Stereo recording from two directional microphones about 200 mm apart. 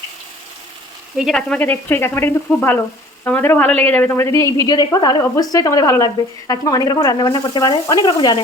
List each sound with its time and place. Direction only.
1.1 s a woman's voice: centre (ahead or behind); by 8.4 s 20° left (ahead or behind)